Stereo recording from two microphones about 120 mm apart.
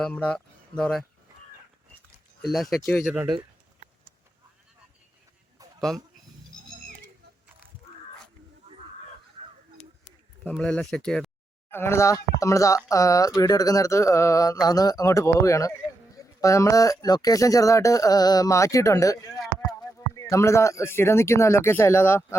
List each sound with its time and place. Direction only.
0.0 s speech: 10° left (ahead or behind)
2.5 s speech: centre (ahead or behind)
3.0 s speech: 10° right (ahead or behind)
10.6 s speech: 10° left (ahead or behind)
11.7 s speech: 20° left (ahead or behind)